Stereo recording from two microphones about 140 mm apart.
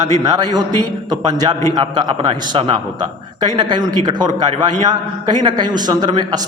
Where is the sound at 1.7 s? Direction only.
30° right (ahead or behind).